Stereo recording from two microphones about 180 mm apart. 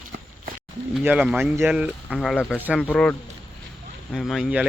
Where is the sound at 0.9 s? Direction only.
5° right (ahead or behind).